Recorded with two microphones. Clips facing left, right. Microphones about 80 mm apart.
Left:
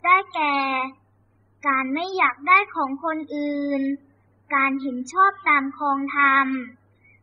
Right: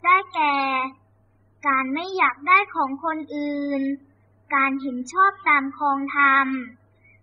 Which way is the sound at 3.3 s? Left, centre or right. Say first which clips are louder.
Left 1 dB; right.